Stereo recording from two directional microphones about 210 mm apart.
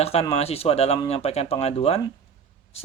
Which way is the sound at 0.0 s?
30° left (ahead or behind).